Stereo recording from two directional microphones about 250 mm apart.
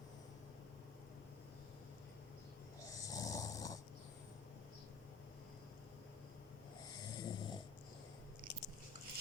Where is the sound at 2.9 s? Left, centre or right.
Centre.